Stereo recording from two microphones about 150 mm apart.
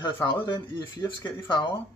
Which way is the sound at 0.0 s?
30° left (ahead or behind).